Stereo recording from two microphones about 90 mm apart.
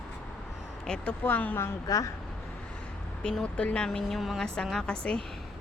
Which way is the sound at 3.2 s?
10° left (ahead or behind).